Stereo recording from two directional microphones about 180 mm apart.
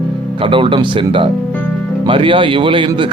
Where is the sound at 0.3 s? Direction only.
30° right (ahead or behind).